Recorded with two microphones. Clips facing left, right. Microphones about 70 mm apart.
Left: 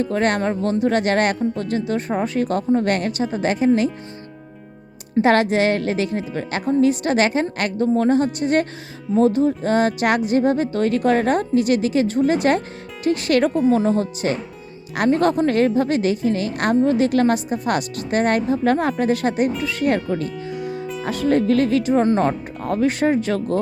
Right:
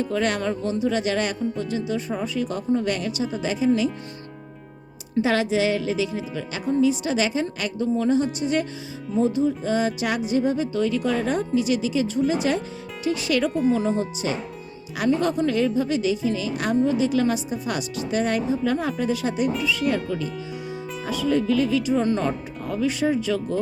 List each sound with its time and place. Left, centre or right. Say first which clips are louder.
0.0 s a woman's voice: left 4 dB; left
5.2 s a woman's voice: left 5 dB; left